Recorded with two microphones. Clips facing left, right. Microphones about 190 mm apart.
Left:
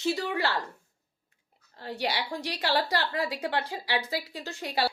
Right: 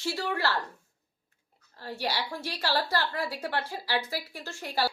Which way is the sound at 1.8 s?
15° left (ahead or behind).